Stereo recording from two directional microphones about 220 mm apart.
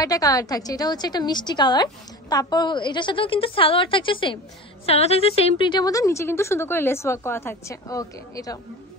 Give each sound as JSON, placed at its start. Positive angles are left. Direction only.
{"t": 0.0, "sound": "a woman's voice", "side_deg": 15}